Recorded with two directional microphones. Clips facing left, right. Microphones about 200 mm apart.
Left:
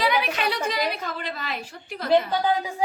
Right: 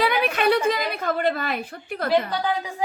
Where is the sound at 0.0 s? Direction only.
55° right (ahead or behind).